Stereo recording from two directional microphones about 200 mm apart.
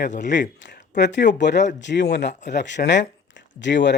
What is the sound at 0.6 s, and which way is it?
Speech, 60° left (ahead or behind).